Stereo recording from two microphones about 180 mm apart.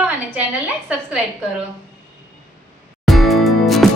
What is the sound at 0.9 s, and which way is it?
Speech, 5° right (ahead or behind).